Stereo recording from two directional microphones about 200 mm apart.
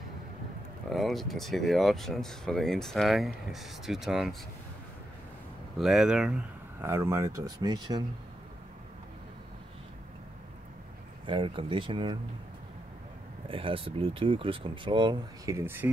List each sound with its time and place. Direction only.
0.8 s speech: centre (ahead or behind)
5.8 s speech: centre (ahead or behind); by 8.0 s 20° right (ahead or behind)
11.2 s speech: 25° right (ahead or behind)
13.5 s speech: 25° right (ahead or behind); by 15.9 s 10° right (ahead or behind)